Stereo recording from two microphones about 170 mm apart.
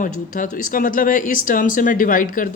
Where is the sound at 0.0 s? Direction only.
50° left (ahead or behind).